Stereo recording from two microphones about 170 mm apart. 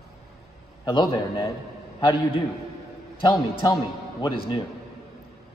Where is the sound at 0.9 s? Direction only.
25° left (ahead or behind).